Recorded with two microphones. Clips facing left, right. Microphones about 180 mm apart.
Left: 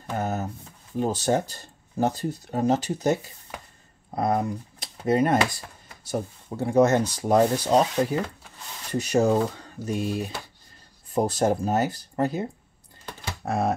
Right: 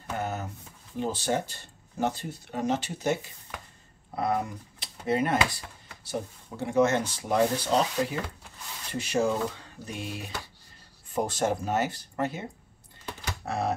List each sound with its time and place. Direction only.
0.2 s a sound: 40° left (ahead or behind)
0.9 s speech: 40° left (ahead or behind)
13.5 s speech: 50° left (ahead or behind)